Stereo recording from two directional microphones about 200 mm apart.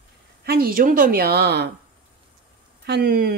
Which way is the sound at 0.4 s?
50° right (ahead or behind).